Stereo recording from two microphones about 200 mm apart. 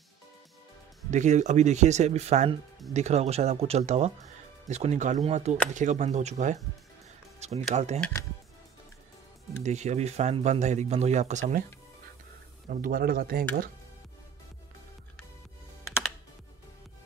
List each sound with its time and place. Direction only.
1.1 s speech: 35° right (ahead or behind)
8.0 s speech: 15° left (ahead or behind)
9.6 s speech: 35° right (ahead or behind)
12.6 s speech: 45° right (ahead or behind)